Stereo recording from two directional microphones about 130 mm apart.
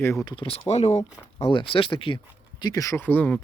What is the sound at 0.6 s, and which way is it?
Speech, 60° left (ahead or behind).